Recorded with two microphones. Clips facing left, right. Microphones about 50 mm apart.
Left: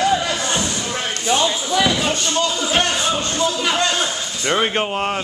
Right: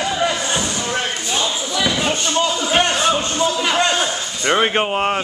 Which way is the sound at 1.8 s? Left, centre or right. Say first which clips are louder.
Even; centre.